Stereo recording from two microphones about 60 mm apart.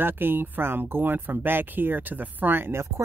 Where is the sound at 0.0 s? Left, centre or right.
Right.